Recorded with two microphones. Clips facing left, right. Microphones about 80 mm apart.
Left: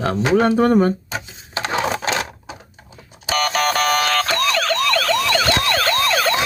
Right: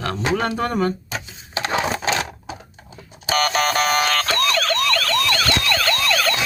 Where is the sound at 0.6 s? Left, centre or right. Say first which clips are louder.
Left 6 dB; left.